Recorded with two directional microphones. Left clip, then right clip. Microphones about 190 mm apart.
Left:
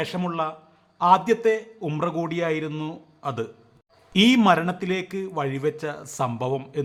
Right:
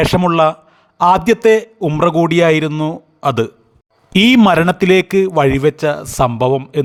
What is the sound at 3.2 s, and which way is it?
A man's voice, 45° right (ahead or behind).